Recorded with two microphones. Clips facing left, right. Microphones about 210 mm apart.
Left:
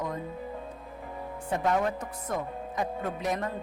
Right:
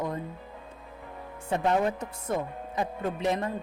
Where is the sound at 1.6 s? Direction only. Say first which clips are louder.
Right 2 dB; 25° right (ahead or behind).